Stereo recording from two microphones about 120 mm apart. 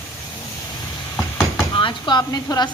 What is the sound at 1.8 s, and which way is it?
Speech, 40° left (ahead or behind).